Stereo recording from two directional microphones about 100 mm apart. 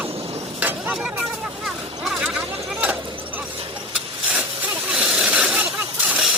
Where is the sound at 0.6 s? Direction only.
20° right (ahead or behind).